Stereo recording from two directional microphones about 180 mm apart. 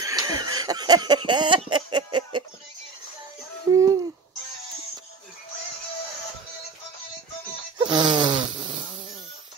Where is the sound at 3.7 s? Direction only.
20° right (ahead or behind).